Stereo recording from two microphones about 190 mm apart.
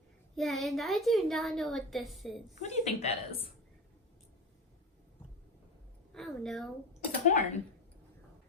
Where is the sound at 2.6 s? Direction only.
30° left (ahead or behind).